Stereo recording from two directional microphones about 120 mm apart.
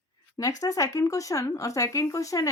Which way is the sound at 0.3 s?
30° left (ahead or behind).